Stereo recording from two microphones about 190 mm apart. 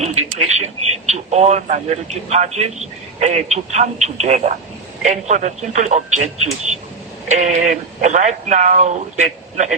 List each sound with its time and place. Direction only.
0.0 s speech: 35° right (ahead or behind)